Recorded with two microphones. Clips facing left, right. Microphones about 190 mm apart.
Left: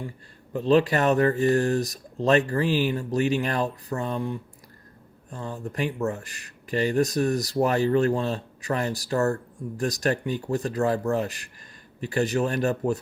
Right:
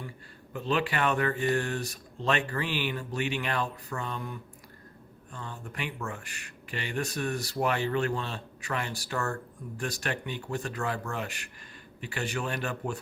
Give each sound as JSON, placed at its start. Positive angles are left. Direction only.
{"t": 0.5, "sound": "speech", "side_deg": 35}